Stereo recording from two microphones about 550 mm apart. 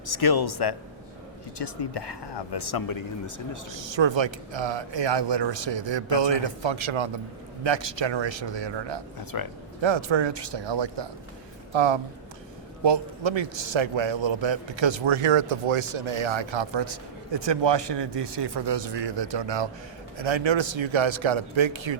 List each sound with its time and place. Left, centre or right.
0.0 s speech: left
3.8 s a man's voice: right
9.3 s speech: left
9.8 s a man's voice: right